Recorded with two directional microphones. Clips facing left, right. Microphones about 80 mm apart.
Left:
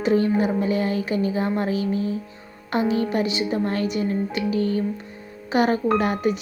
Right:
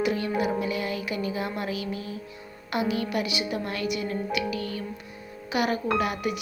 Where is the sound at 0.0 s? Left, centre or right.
Left.